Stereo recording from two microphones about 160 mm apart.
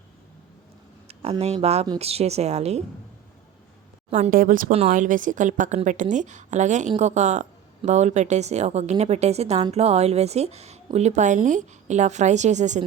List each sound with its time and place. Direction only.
1.0 s speech: 40° right (ahead or behind)
4.3 s a woman's voice: 60° right (ahead or behind)